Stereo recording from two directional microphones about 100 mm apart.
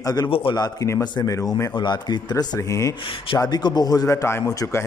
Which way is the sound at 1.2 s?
35° left (ahead or behind).